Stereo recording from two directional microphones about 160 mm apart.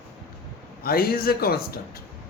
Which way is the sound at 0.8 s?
70° left (ahead or behind).